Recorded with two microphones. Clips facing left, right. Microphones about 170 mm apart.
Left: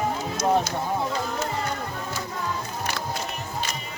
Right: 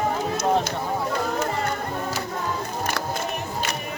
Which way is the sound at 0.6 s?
55° right (ahead or behind).